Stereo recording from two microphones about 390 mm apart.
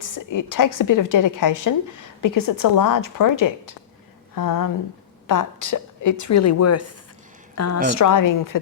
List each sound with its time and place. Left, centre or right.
0.0 s a woman's voice: left